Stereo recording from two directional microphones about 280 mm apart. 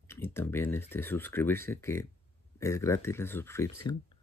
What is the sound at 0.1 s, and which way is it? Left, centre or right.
Speech, centre.